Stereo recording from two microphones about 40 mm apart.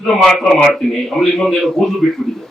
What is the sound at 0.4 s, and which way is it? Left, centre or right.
Speech, centre.